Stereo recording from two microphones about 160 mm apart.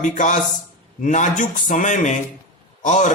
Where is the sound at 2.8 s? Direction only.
50° left (ahead or behind).